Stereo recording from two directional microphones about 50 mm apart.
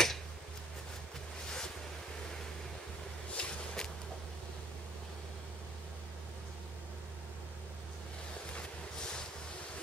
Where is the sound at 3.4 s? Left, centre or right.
Centre.